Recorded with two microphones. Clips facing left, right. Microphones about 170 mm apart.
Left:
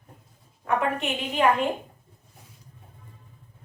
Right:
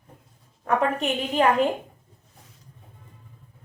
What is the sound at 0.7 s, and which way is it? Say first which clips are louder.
Speech: right 2 dB; 35° right (ahead or behind).